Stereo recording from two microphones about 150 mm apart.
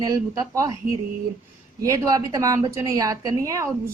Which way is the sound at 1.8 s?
25° right (ahead or behind).